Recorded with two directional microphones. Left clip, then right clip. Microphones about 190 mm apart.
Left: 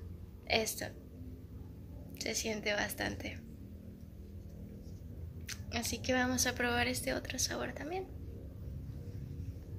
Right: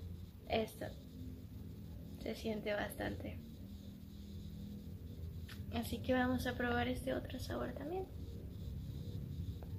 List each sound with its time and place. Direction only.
0.5 s a woman's voice: 5° left (ahead or behind)
2.1 s a woman's voice: 5° left (ahead or behind)
5.7 s a woman's voice: centre (ahead or behind)